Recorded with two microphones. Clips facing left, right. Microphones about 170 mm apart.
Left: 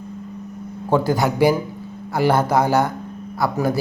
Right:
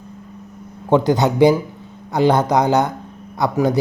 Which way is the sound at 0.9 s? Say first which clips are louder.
Right 3 dB; 20° right (ahead or behind).